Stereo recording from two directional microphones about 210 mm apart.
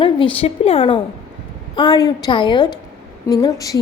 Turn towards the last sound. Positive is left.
turn(degrees=15)  # may be behind; listen again after turning